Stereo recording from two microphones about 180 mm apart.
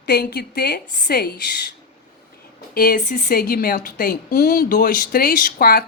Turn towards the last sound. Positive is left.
turn(degrees=55)  # may be behind; listen again after turning